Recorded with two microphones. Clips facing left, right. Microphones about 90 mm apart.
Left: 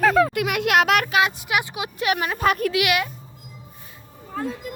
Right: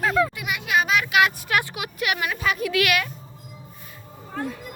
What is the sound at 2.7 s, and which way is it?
Speech, 20° left (ahead or behind).